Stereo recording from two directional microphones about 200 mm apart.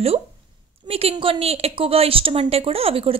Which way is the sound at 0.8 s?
30° right (ahead or behind).